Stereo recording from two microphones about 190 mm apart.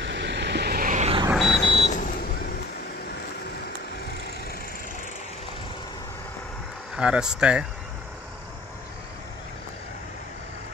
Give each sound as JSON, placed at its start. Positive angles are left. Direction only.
{"t": 0.0, "sound": "vehicle", "side_deg": -70}
{"t": 1.3, "sound": "vehicle", "side_deg": 0}
{"t": 1.6, "sound": "vehicle", "side_deg": 25}
{"t": 7.0, "sound": "speech", "side_deg": -5}